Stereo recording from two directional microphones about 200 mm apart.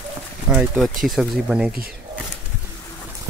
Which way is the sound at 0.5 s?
Centre (ahead or behind).